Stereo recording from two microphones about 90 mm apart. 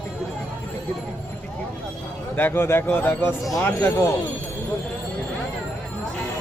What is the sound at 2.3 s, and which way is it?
Speech, 25° left (ahead or behind).